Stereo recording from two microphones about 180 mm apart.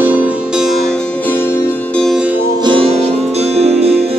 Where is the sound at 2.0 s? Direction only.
Centre (ahead or behind).